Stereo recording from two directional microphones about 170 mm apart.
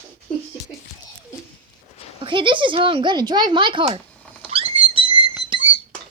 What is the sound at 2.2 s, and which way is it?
Speech, 30° right (ahead or behind).